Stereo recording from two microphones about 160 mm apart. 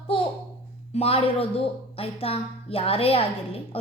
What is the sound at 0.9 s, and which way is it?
A woman's voice, 40° left (ahead or behind).